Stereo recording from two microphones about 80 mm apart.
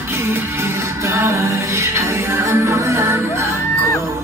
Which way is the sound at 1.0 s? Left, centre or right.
Right.